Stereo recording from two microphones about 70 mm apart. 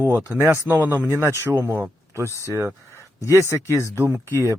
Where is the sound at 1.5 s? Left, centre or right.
Right.